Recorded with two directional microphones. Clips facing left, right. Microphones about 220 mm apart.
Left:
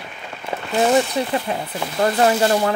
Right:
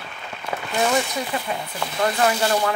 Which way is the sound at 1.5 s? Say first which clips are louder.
Left 3 dB; 30° left (ahead or behind).